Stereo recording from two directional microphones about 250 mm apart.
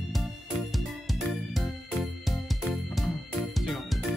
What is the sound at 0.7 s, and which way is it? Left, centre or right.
Music, centre.